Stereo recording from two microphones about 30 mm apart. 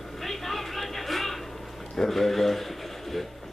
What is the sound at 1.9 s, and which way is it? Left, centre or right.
A man's voice, centre.